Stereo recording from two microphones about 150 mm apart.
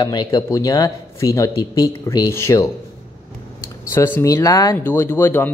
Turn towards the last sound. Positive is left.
turn(degrees=15)  # may be behind; listen again after turning